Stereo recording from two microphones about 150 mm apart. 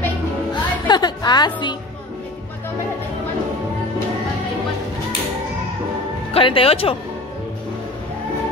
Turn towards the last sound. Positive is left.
turn(degrees=40)  # may be behind; listen again after turning